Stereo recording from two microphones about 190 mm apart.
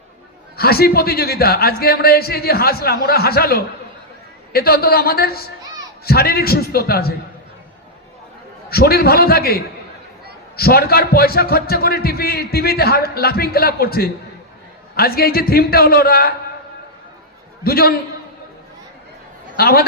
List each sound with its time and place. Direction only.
0.5 s a man's voice: 55° left (ahead or behind)
8.7 s a man's voice: 55° left (ahead or behind)
17.6 s a man's voice: 55° left (ahead or behind)
19.5 s a man's voice: 55° left (ahead or behind)